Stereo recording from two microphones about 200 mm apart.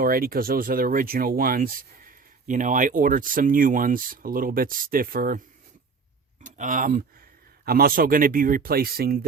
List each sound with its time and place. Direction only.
0.0 s speech: 45° right (ahead or behind)
6.4 s speech: 40° right (ahead or behind)